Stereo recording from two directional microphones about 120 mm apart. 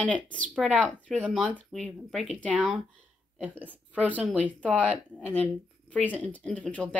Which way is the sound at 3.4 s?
15° right (ahead or behind).